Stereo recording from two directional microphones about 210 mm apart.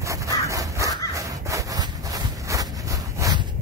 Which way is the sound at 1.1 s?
15° right (ahead or behind).